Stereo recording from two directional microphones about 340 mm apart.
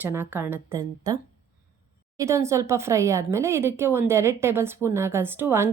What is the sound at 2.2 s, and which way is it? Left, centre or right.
A woman's voice, centre.